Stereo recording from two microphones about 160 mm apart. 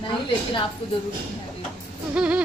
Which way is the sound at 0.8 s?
35° left (ahead or behind).